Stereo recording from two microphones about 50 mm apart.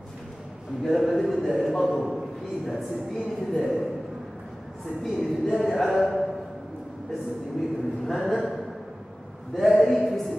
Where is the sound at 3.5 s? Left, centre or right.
Centre.